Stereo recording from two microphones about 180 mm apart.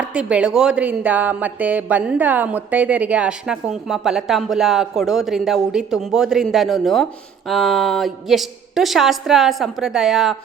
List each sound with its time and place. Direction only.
0.0 s speech: 5° right (ahead or behind)